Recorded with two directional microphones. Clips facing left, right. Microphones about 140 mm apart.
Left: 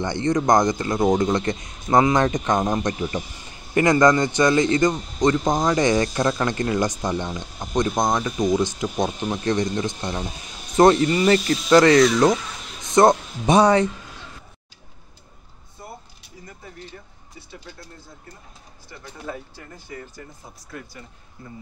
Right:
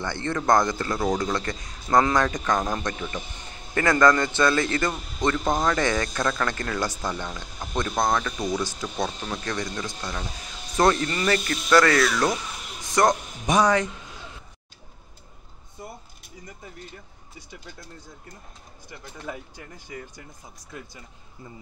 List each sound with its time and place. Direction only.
0.0 s a man's voice: 20° left (ahead or behind)
19.2 s speech: 15° right (ahead or behind)